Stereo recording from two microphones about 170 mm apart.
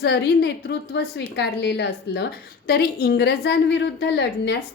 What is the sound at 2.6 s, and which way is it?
A woman's voice, 65° left (ahead or behind).